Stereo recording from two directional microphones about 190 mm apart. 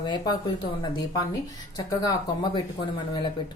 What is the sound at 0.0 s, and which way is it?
A woman's voice, 20° left (ahead or behind).